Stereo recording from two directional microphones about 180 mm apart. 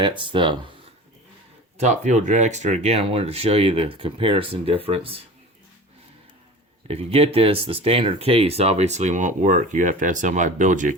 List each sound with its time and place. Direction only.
0.2 s speech: 25° right (ahead or behind)
1.8 s speech: 40° right (ahead or behind)
6.8 s speech: 35° right (ahead or behind)